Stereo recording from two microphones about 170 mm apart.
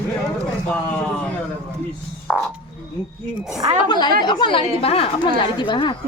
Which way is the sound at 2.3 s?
5° right (ahead or behind).